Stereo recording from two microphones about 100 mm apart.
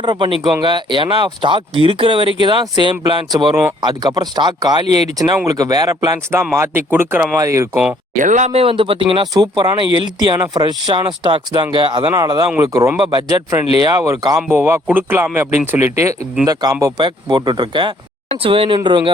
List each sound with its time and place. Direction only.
0.0 s speech: 50° right (ahead or behind)
6.6 s speech: 25° right (ahead or behind)
7.3 s speech: 30° right (ahead or behind)
8.4 s speech: 75° right (ahead or behind)
9.2 s speech: 40° right (ahead or behind); by 12.1 s 55° right (ahead or behind)
12.1 s speech: 40° right (ahead or behind)
13.0 s speech: 50° right (ahead or behind)
13.8 s speech: 35° right (ahead or behind)
14.5 s speech: 25° right (ahead or behind)
16.5 s speech: 40° right (ahead or behind)
18.4 s speech: 65° right (ahead or behind)